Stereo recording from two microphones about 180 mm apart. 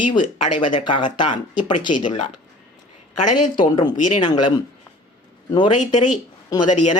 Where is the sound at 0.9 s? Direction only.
25° left (ahead or behind).